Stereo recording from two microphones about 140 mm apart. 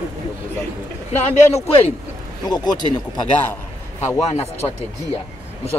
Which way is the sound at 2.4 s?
30° left (ahead or behind).